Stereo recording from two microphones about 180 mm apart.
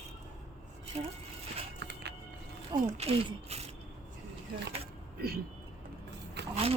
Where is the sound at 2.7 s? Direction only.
35° right (ahead or behind).